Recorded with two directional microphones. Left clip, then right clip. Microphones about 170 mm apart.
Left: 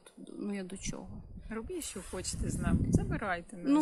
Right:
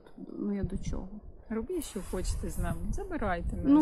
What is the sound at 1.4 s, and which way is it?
Speech, 15° right (ahead or behind).